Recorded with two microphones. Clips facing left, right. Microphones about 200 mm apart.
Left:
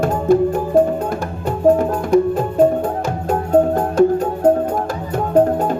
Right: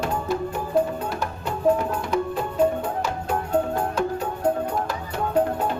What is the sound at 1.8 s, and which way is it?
Music, 50° left (ahead or behind).